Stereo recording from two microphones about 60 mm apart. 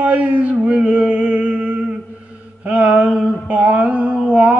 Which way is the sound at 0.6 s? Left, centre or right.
Centre.